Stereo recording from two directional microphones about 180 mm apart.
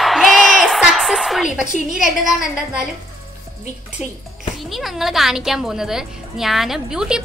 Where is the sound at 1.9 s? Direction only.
Centre (ahead or behind).